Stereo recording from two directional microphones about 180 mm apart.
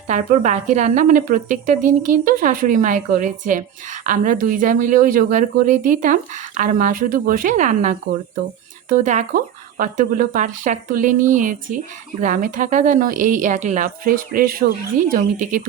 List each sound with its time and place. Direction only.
0.1 s speech: 40° right (ahead or behind)